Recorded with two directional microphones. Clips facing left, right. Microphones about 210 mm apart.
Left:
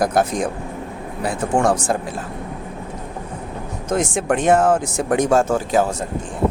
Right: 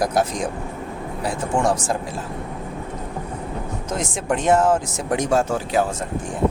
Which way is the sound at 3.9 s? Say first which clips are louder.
Left 5 dB; 55° left (ahead or behind).